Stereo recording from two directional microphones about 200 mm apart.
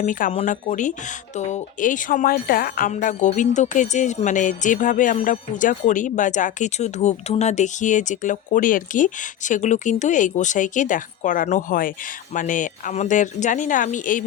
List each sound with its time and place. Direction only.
0.0 s speech: 40° left (ahead or behind)